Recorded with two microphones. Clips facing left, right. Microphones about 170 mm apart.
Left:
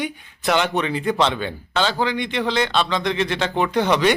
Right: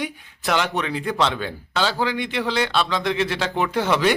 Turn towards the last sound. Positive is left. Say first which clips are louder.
# left 2 dB
turn(degrees=-5)  # may be behind; listen again after turning